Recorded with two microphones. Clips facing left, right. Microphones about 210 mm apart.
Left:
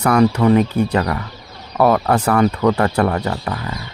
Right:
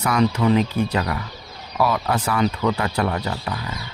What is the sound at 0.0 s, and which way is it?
Speech, 60° left (ahead or behind).